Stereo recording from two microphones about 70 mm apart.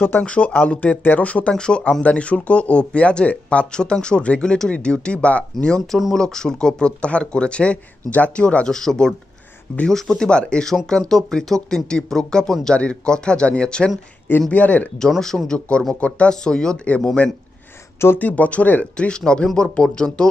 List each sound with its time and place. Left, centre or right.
0.2 s speech: centre
5.9 s speech: centre
6.1 s speech: centre
15.0 s speech: centre
18.0 s speech: left